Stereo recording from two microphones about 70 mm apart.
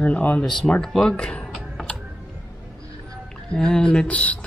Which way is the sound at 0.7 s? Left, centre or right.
Centre.